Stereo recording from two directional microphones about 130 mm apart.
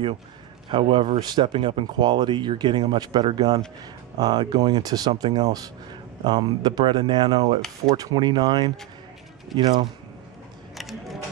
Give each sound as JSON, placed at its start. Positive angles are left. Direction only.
{"t": 0.7, "sound": "speech", "side_deg": -40}
{"t": 9.5, "sound": "speech", "side_deg": 0}
{"t": 10.8, "sound": "mechanisms", "side_deg": 0}